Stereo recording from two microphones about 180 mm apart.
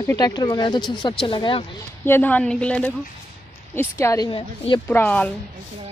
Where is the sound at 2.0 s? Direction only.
10° left (ahead or behind); by 4.8 s 25° left (ahead or behind).